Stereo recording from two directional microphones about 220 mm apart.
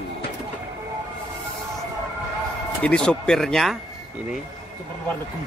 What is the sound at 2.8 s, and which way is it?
Speech, 5° left (ahead or behind).